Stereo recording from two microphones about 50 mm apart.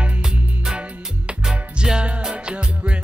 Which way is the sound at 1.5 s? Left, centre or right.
Centre.